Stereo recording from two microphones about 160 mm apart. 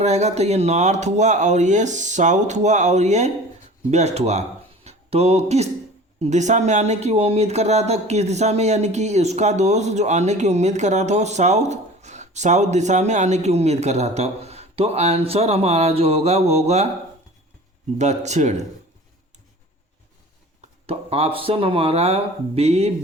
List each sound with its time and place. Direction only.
0.0 s speech: 45° right (ahead or behind)
17.9 s speech: 45° right (ahead or behind)
20.8 s speech: 40° right (ahead or behind)